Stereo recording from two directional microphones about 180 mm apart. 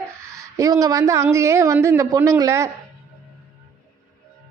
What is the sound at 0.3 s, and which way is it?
A woman's voice, 20° right (ahead or behind).